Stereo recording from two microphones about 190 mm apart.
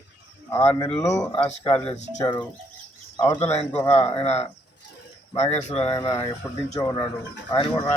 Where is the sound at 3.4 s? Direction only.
35° left (ahead or behind).